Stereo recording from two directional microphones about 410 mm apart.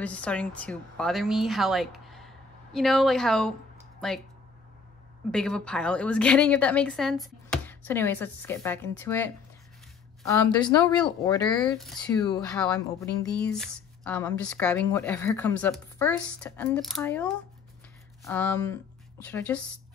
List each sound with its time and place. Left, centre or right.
0.0 s speech: centre
5.3 s a woman's voice: centre